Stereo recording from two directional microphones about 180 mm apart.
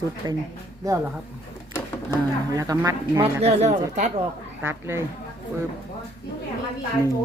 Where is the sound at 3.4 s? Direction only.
35° right (ahead or behind).